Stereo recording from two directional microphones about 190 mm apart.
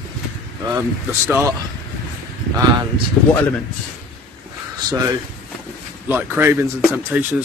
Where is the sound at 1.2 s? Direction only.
15° right (ahead or behind).